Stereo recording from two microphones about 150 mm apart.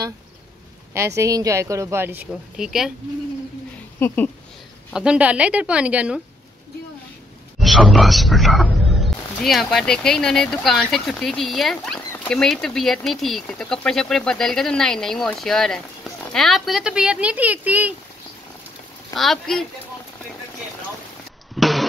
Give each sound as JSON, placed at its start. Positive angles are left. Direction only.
{"t": 0.9, "sound": "speech", "side_deg": -20}
{"t": 2.5, "sound": "speech", "side_deg": -5}
{"t": 4.0, "sound": "speech", "side_deg": 10}
{"t": 4.9, "sound": "a woman's voice", "side_deg": -5}
{"t": 7.5, "sound": "speech", "side_deg": 0}
{"t": 19.1, "sound": "speech", "side_deg": 0}
{"t": 21.5, "sound": "music", "side_deg": 0}